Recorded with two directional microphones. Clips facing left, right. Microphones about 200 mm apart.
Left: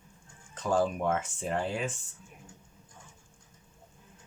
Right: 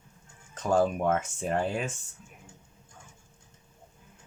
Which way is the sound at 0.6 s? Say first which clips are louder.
Right 3 dB; 45° right (ahead or behind).